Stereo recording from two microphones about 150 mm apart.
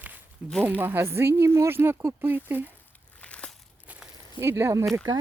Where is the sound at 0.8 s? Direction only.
15° right (ahead or behind).